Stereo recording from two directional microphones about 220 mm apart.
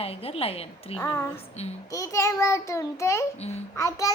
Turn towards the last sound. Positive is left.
turn(degrees=15)  # may be behind; listen again after turning